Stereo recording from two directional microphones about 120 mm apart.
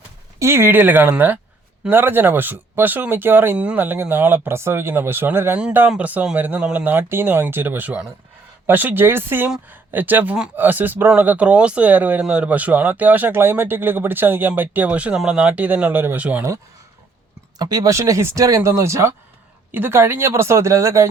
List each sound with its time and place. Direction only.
0.3 s speech: 20° right (ahead or behind)
17.6 s speech: 35° right (ahead or behind)